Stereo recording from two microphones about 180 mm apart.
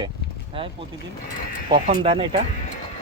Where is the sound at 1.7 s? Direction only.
30° right (ahead or behind).